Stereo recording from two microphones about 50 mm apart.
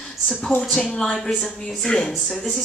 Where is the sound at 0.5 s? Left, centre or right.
Left.